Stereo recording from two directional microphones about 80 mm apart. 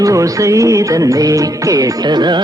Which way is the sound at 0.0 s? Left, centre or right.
Right.